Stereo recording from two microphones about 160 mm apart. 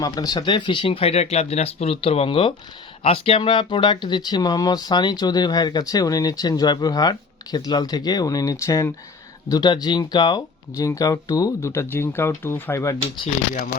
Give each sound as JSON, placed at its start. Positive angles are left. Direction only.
{"t": 0.0, "sound": "speech", "side_deg": 25}